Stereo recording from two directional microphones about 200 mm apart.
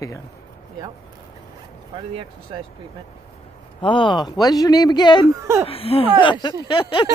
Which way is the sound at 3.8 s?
25° left (ahead or behind).